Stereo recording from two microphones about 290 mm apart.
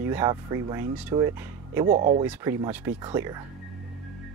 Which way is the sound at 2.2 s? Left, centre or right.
Centre.